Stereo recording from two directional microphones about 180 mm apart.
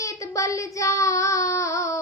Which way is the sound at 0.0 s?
15° left (ahead or behind).